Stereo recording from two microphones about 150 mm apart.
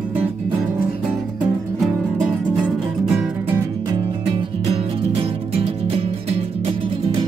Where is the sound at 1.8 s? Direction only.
Centre (ahead or behind).